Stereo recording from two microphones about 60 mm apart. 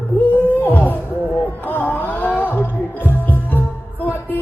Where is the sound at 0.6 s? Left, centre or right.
Left.